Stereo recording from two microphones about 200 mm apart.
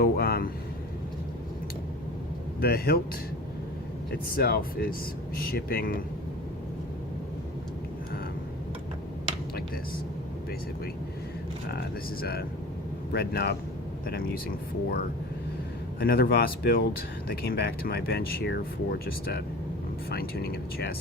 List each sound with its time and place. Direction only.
0.0 s vehicle: 50° left (ahead or behind)
2.6 s speech: 50° left (ahead or behind)
4.1 s speech: 50° left (ahead or behind)
12.2 s speech: 50° left (ahead or behind)